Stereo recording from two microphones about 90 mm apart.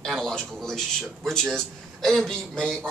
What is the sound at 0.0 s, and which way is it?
A man's voice, 5° left (ahead or behind).